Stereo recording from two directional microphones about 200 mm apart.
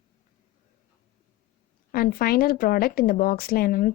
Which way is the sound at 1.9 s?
45° left (ahead or behind).